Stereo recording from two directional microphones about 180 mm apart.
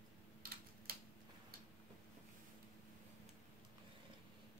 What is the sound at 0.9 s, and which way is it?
Tick-tock, 55° right (ahead or behind).